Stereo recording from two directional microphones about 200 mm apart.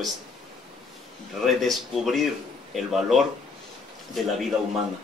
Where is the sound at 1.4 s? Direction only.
Centre (ahead or behind).